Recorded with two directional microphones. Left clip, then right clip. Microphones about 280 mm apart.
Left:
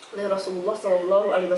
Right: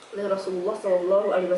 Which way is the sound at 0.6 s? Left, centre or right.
Centre.